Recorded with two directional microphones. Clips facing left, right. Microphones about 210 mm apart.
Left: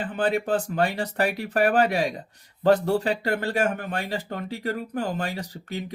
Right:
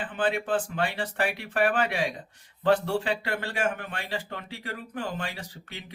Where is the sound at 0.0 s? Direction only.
40° left (ahead or behind).